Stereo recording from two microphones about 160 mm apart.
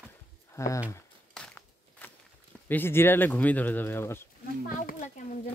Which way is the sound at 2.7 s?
15° left (ahead or behind).